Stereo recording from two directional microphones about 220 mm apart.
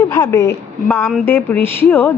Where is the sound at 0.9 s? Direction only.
5° left (ahead or behind).